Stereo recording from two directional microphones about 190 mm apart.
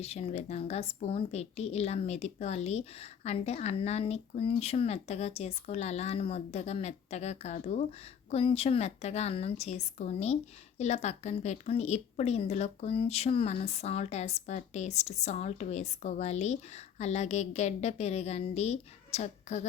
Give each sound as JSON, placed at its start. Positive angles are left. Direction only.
{"t": 0.0, "sound": "a woman's voice", "side_deg": 35}